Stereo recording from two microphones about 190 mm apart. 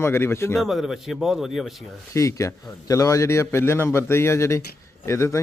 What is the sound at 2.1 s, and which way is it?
A man's voice, 15° left (ahead or behind).